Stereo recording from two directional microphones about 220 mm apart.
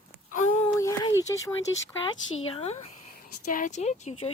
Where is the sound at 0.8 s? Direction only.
15° left (ahead or behind).